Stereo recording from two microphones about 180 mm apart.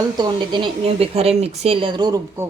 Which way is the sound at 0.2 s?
25° right (ahead or behind).